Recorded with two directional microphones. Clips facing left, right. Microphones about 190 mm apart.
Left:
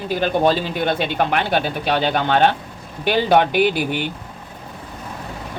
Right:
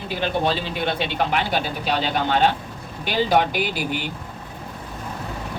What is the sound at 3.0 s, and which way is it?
Speech, 60° left (ahead or behind).